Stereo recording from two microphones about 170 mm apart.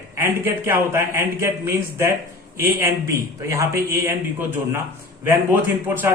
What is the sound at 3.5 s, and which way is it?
Speech, 20° right (ahead or behind).